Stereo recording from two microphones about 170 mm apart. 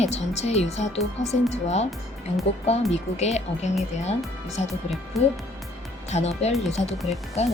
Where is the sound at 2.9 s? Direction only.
40° left (ahead or behind).